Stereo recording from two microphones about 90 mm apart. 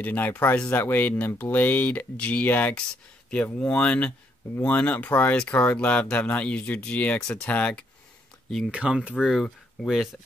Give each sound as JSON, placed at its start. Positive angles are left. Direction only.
{"t": 0.0, "sound": "speech", "side_deg": 20}
{"t": 8.7, "sound": "speech", "side_deg": -10}